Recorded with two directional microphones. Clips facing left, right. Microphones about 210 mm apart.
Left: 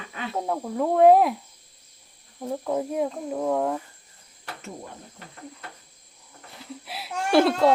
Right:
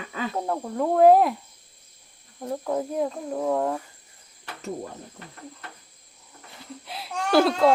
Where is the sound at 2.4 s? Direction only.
Centre (ahead or behind).